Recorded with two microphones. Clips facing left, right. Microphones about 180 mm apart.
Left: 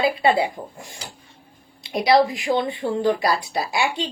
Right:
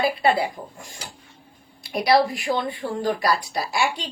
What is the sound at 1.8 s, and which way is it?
A woman's voice, 20° left (ahead or behind).